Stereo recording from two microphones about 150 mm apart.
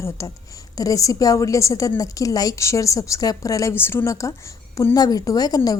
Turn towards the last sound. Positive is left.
turn(degrees=25)  # may be behind; listen again after turning